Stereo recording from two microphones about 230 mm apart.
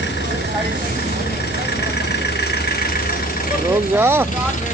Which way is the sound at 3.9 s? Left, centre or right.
Centre.